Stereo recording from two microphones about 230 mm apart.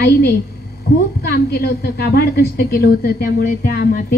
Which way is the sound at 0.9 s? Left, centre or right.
Left.